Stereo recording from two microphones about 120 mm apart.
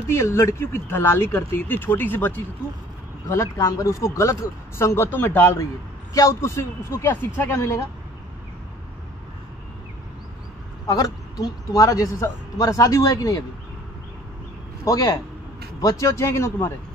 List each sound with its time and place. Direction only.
0.0 s speech: 20° left (ahead or behind)
10.9 s speech: 25° left (ahead or behind)
14.9 s speech: 30° left (ahead or behind)